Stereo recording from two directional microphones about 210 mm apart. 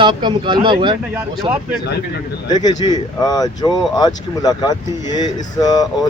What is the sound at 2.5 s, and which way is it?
Speech, 20° left (ahead or behind).